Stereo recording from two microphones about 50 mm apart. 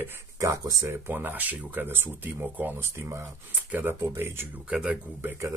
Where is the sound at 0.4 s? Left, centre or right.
Right.